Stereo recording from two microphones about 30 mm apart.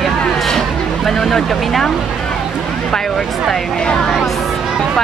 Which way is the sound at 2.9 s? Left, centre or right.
Centre.